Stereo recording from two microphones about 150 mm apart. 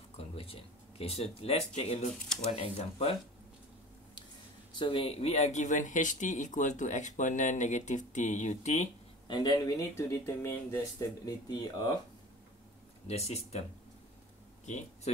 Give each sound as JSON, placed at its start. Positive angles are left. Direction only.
{"t": 0.2, "sound": "speech", "side_deg": 40}
{"t": 4.7, "sound": "speech", "side_deg": 35}
{"t": 9.3, "sound": "speech", "side_deg": 25}
{"t": 13.0, "sound": "speech", "side_deg": 45}